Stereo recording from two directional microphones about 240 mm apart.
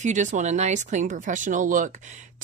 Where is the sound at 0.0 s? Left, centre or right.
Right.